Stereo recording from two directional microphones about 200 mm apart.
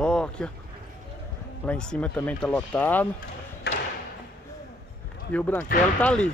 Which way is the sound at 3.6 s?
55° left (ahead or behind).